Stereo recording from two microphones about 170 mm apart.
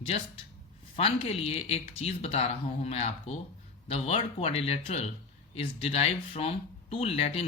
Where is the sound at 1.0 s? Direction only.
35° left (ahead or behind).